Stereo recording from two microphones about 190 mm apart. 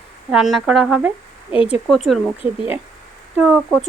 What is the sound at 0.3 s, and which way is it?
Speech, centre (ahead or behind).